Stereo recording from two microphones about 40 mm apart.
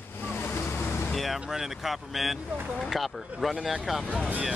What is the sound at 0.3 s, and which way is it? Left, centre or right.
Vehicle, left.